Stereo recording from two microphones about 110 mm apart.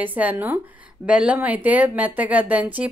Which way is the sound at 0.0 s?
15° right (ahead or behind).